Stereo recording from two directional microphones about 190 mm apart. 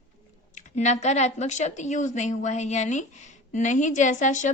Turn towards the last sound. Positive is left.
turn(degrees=40)  # may be behind; listen again after turning